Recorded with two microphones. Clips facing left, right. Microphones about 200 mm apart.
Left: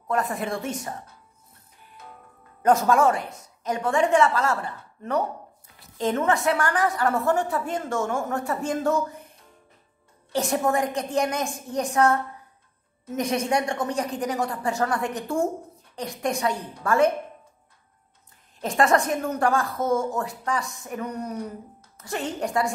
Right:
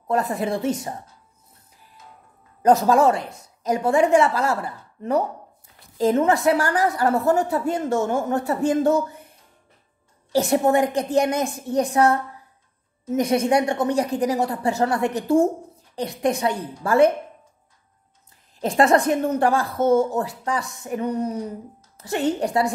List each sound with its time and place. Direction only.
0.1 s a woman's voice: 35° right (ahead or behind)
2.6 s a woman's voice: 35° right (ahead or behind)
10.3 s a woman's voice: 30° right (ahead or behind)
18.6 s a woman's voice: 30° right (ahead or behind)